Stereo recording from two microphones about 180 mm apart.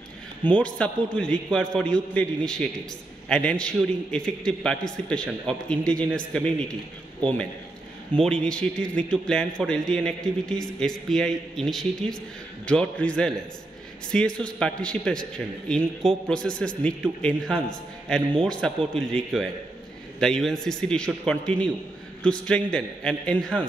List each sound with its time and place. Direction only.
0.4 s a man's voice: 5° left (ahead or behind)